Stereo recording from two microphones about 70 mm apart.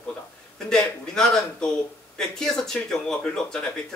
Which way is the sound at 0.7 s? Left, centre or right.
Centre.